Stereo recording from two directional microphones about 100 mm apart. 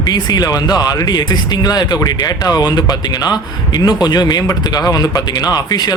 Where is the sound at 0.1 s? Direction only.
40° left (ahead or behind).